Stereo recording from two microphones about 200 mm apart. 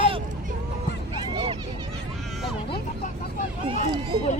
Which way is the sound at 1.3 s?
25° right (ahead or behind).